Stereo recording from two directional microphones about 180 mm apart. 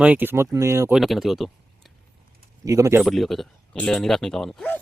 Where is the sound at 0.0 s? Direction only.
10° right (ahead or behind).